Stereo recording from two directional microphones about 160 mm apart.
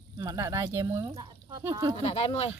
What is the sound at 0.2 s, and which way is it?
Speech, 20° right (ahead or behind).